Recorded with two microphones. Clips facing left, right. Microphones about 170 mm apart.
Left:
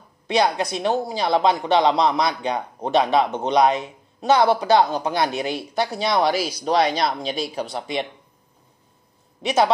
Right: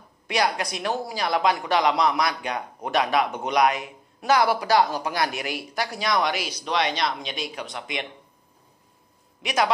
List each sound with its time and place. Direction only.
0.3 s speech: 25° left (ahead or behind)
9.4 s speech: 30° left (ahead or behind)